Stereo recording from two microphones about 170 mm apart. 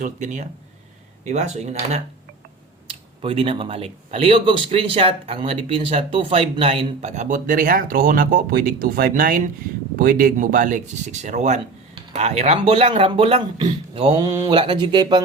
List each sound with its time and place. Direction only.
0.0 s speech: 45° right (ahead or behind); by 15.2 s 25° right (ahead or behind)